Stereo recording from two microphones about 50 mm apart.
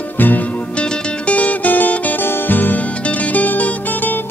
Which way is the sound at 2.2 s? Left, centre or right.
Left.